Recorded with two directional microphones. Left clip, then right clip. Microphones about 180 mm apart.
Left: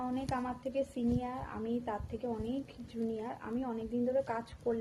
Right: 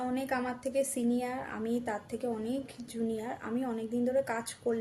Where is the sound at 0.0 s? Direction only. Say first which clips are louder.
Right 4 dB; 25° right (ahead or behind).